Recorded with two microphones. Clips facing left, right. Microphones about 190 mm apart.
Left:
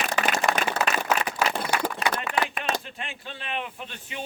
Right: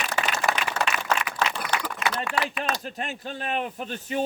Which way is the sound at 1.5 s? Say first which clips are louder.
Left 3 dB; 25° left (ahead or behind).